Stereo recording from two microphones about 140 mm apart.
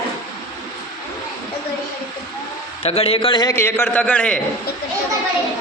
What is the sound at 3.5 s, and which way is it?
Speech, 20° left (ahead or behind).